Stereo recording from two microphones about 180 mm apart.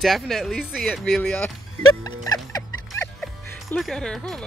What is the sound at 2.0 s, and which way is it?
Music, 20° left (ahead or behind).